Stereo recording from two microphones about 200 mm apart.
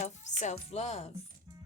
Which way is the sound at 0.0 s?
35° left (ahead or behind).